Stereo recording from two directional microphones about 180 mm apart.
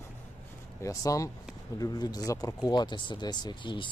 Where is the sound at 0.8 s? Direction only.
20° left (ahead or behind).